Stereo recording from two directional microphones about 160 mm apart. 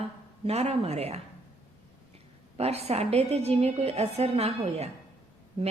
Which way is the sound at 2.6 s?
40° right (ahead or behind).